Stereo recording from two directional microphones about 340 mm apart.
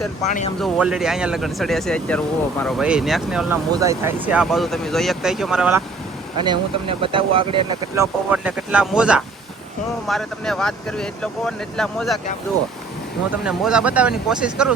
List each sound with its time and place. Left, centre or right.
0.3 s speech: left
0.6 s speech: centre
6.4 s speech: centre
13.4 s speech: centre